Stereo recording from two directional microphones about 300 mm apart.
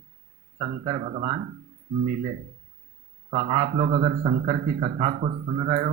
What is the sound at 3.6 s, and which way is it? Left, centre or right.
A man's voice, right.